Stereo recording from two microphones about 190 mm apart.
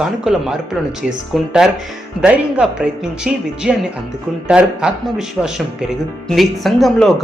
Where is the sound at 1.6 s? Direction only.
5° right (ahead or behind).